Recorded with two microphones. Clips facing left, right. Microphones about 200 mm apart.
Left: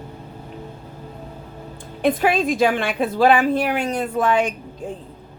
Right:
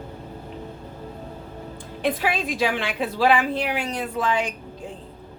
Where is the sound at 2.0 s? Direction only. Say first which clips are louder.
Left 6 dB; 50° left (ahead or behind).